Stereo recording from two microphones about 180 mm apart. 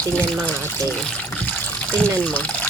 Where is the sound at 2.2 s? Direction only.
5° left (ahead or behind).